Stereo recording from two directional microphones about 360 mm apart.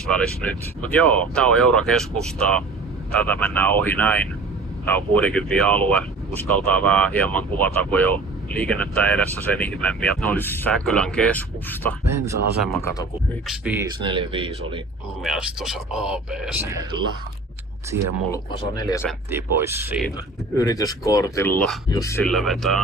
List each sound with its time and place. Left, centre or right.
0.1 s speech: centre
13.5 s speech: centre
15.2 s speech: centre
17.9 s speech: right
18.8 s speech: centre
19.3 s speech: centre
20.6 s speech: centre